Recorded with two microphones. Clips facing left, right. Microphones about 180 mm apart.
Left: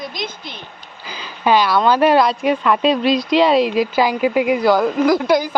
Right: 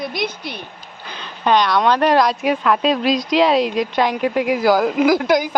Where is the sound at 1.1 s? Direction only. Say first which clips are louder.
Left 1 dB; 5° left (ahead or behind).